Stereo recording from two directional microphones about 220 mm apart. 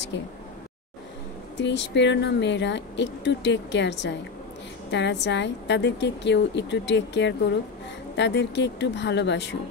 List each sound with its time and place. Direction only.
0.1 s speech: 55° left (ahead or behind)
1.6 s speech: 55° left (ahead or behind)